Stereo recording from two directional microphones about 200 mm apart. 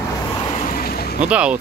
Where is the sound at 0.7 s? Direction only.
50° left (ahead or behind).